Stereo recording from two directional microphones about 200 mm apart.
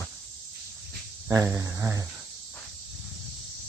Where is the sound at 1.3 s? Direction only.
15° right (ahead or behind).